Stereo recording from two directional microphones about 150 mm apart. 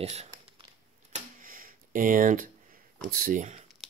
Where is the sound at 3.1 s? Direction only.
65° right (ahead or behind).